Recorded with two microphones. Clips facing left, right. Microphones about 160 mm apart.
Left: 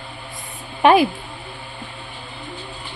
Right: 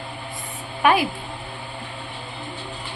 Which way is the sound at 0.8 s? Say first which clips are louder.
Left 5 dB; 25° left (ahead or behind).